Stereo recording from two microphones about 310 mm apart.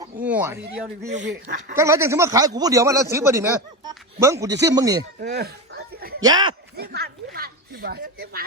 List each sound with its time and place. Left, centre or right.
0.0 s a sound: centre
1.0 s speech: right
1.7 s speech: centre
5.2 s a sound: right
6.2 s speech: centre
6.7 s speech: right